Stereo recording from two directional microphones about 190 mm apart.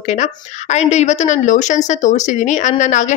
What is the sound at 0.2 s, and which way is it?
Speech, 35° left (ahead or behind).